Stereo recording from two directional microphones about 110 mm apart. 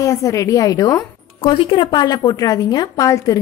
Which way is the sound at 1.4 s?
45° left (ahead or behind).